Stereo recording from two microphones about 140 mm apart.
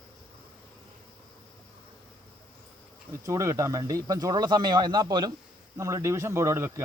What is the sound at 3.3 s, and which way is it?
Speech, 20° right (ahead or behind).